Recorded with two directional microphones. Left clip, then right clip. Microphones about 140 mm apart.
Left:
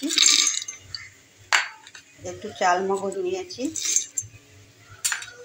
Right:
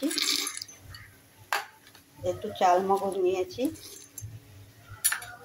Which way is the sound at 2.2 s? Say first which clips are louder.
Even; 5° left (ahead or behind).